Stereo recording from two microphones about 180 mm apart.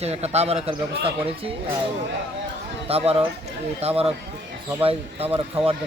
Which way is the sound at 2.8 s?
35° right (ahead or behind).